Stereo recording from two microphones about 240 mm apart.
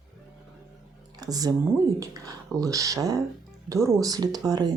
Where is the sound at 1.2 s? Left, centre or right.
Centre.